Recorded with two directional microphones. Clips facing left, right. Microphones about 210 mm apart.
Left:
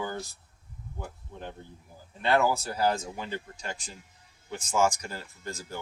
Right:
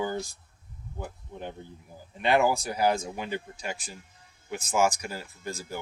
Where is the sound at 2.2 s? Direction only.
15° right (ahead or behind).